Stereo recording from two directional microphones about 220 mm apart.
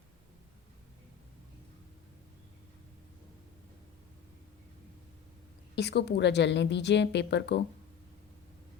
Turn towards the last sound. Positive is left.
turn(degrees=50)  # may be behind; listen again after turning